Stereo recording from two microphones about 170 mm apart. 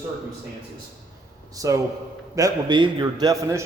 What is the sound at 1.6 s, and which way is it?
A man's voice, 20° right (ahead or behind).